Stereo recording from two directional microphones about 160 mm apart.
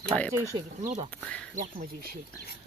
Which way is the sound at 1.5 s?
60° right (ahead or behind).